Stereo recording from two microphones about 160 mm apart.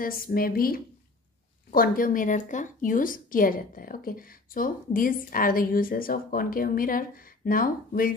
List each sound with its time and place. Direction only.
0.0 s a woman's voice: 65° left (ahead or behind)